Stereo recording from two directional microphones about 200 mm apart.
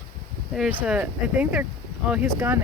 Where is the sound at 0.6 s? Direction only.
5° right (ahead or behind).